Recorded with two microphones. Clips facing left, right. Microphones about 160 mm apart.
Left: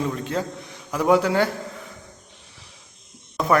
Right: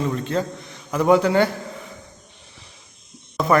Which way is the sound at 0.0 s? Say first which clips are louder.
Right 2 dB; 10° left (ahead or behind).